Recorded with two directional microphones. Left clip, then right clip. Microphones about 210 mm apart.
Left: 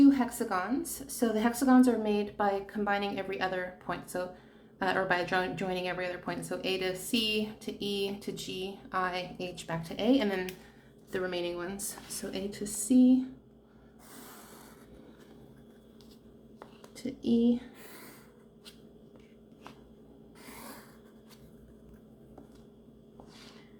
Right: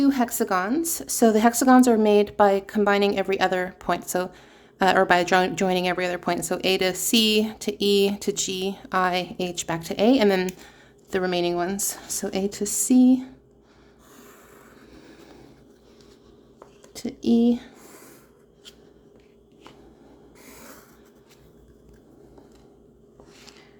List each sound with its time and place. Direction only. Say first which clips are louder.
0.0 s a woman's voice: right 3 dB; 50° right (ahead or behind)
16.9 s a woman's voice: right 7 dB; 50° right (ahead or behind)
20.4 s a sound: right 1 dB; centre (ahead or behind)